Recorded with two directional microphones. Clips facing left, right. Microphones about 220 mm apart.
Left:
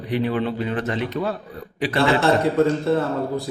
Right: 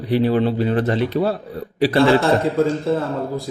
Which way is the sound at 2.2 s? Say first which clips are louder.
Even; centre (ahead or behind).